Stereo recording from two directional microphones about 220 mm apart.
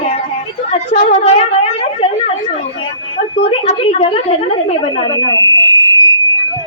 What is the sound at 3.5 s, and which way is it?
A woman's voice, 25° left (ahead or behind).